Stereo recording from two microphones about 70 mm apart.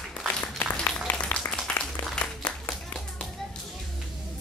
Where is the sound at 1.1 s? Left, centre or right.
Left.